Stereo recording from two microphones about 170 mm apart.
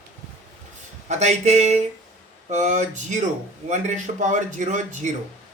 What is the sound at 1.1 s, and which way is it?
Speech, 40° right (ahead or behind).